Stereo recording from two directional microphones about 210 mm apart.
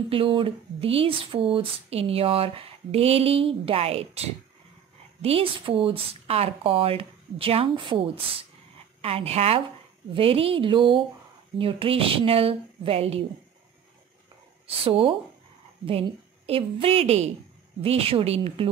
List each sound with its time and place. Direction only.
0.1 s speech: 25° right (ahead or behind)
14.8 s a woman's voice: 25° right (ahead or behind)